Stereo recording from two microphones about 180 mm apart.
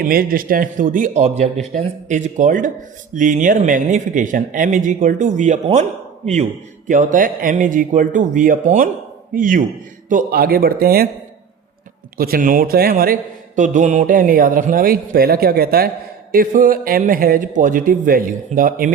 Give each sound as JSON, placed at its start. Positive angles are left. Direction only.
{"t": 0.0, "sound": "a man's voice", "side_deg": -55}
{"t": 12.1, "sound": "a man's voice", "side_deg": -55}
{"t": 13.6, "sound": "a man's voice", "side_deg": -45}